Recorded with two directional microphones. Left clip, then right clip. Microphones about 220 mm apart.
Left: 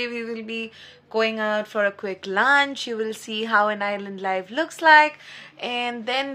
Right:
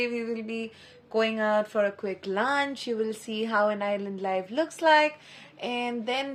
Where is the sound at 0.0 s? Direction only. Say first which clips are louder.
Left 1 dB; centre (ahead or behind).